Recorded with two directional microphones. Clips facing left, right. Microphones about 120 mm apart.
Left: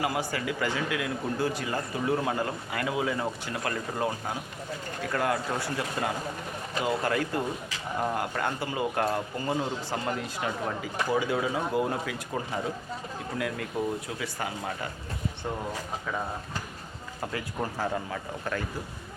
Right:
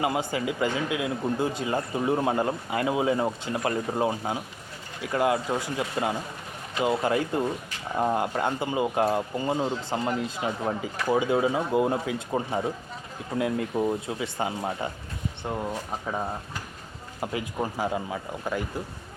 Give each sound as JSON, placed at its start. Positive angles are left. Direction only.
{"t": 0.0, "sound": "speech", "side_deg": -20}
{"t": 17.2, "sound": "speech", "side_deg": -15}